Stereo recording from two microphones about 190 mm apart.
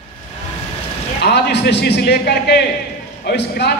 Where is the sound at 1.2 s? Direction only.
60° left (ahead or behind).